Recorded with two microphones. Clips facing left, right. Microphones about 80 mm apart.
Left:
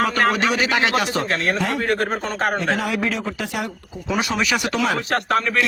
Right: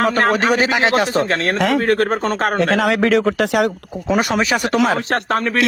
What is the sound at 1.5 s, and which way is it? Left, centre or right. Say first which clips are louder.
Speech: right 6 dB; right.